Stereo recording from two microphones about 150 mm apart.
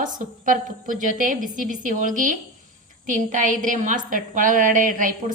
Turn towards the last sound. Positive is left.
turn(degrees=-65)  # may be behind; listen again after turning